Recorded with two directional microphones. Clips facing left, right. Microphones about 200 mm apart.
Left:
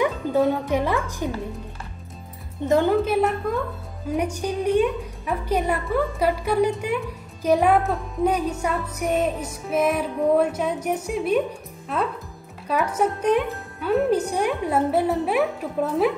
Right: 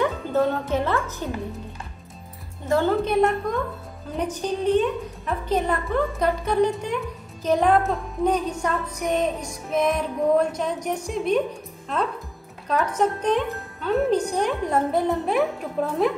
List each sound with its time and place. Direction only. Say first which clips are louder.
0.0 s speech: left 1 dB; 10° left (ahead or behind)
2.6 s speech: left 3 dB; 20° left (ahead or behind)
3.1 s a woman's voice: right 1 dB; 5° left (ahead or behind)
12.6 s speech: even; 10° left (ahead or behind)